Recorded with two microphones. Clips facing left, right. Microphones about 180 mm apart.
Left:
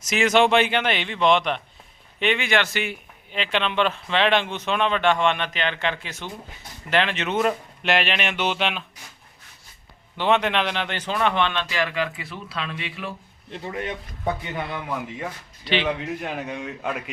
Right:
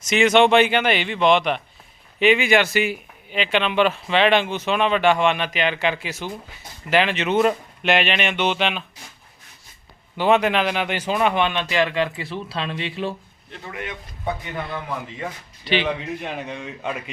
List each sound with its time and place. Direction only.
0.0 s speech: centre (ahead or behind)
10.2 s speech: 5° right (ahead or behind); by 13.1 s 30° right (ahead or behind)
13.5 s a man's voice: 30° left (ahead or behind)
14.7 s speech: 5° left (ahead or behind)